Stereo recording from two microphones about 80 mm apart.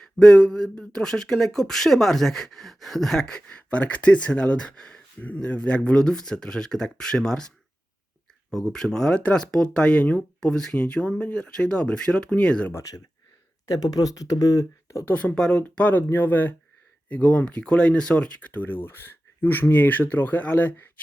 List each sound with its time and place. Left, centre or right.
0.0 s speech: centre
13.7 s speech: left
15.0 s speech: centre
15.4 s speech: centre
15.6 s speech: centre